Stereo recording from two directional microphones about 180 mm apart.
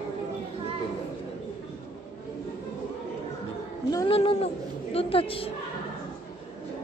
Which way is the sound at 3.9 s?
30° left (ahead or behind).